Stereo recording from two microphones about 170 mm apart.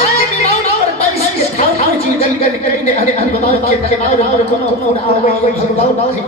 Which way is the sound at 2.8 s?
40° left (ahead or behind).